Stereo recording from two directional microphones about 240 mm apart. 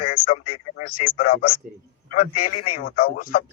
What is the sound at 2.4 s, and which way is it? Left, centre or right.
Speech, left.